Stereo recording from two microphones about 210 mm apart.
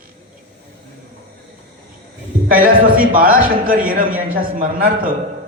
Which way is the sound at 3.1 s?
40° right (ahead or behind).